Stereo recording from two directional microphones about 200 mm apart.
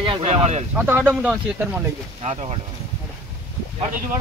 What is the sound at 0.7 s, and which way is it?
Speech, 10° right (ahead or behind).